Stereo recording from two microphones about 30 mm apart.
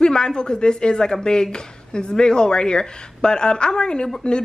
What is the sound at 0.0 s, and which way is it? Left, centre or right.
Speech, left.